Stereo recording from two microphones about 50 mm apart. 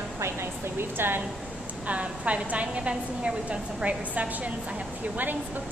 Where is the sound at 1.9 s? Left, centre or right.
Right.